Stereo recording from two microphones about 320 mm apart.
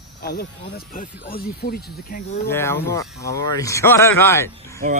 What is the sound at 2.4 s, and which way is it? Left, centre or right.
A man's voice, centre.